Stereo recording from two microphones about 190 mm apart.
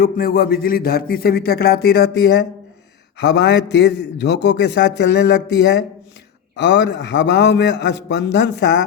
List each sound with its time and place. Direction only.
0.0 s a man's voice: 50° left (ahead or behind); by 8.8 s 70° left (ahead or behind)